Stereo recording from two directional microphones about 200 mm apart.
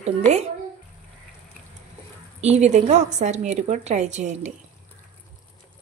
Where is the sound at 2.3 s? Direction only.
35° right (ahead or behind).